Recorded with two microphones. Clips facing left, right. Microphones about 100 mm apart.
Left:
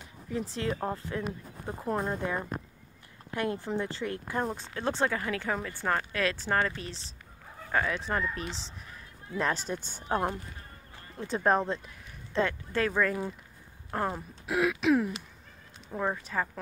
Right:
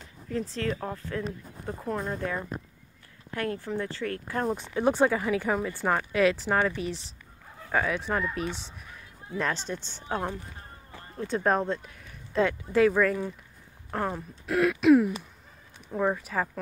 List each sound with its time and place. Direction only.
0.0 s speech: 15° left (ahead or behind)
1.2 s speech: 10° left (ahead or behind)
4.5 s speech: 15° right (ahead or behind); by 9.8 s 5° left (ahead or behind)
9.8 s a woman's voice: 45° left (ahead or behind)
10.0 s speech: 15° left (ahead or behind)
11.1 s speech: centre (ahead or behind)